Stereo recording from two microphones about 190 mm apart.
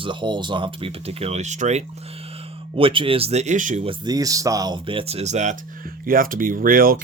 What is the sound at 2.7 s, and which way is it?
Speech, 25° right (ahead or behind).